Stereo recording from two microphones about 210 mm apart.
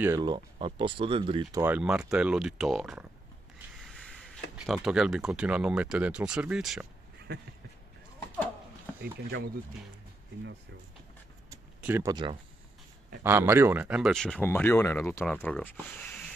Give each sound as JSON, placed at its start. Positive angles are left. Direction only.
{"t": 0.0, "sound": "speech", "side_deg": -15}
{"t": 9.0, "sound": "speech", "side_deg": -45}
{"t": 11.5, "sound": "a sound", "side_deg": -10}
{"t": 13.2, "sound": "speech", "side_deg": -10}